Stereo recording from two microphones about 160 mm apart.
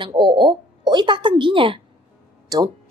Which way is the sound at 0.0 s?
30° right (ahead or behind).